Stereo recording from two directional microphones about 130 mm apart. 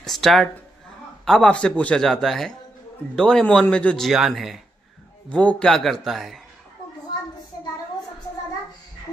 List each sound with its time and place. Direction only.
0.0 s a man's voice: centre (ahead or behind)